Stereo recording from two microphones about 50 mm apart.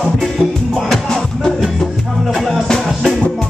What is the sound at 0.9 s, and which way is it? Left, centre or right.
Music, centre.